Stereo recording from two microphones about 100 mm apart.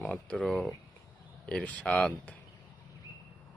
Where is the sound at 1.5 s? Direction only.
10° left (ahead or behind).